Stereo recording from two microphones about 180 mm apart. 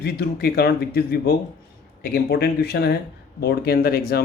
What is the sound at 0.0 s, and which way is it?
Speech, 65° left (ahead or behind).